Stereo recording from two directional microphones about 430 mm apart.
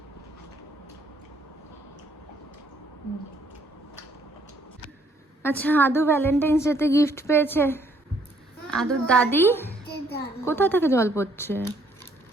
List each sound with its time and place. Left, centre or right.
5.4 s a woman's voice: centre
9.8 s music: left
10.4 s a woman's voice: centre